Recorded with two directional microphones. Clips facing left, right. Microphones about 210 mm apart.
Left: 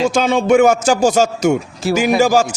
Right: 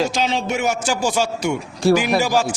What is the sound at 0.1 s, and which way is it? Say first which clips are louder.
Speech: left 9 dB; 50° left (ahead or behind).